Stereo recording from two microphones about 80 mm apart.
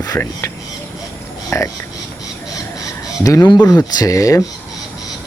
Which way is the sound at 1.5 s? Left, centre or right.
Left.